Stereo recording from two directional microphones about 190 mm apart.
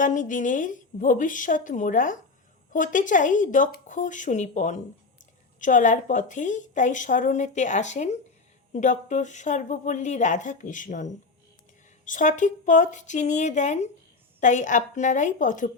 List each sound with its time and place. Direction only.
0.0 s a woman's voice: 45° left (ahead or behind)